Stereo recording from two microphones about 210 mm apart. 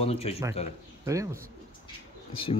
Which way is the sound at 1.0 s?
15° right (ahead or behind).